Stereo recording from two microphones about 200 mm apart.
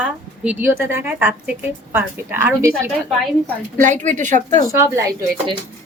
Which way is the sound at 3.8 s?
40° right (ahead or behind).